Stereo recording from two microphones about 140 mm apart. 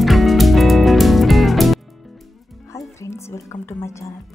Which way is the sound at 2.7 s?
20° left (ahead or behind).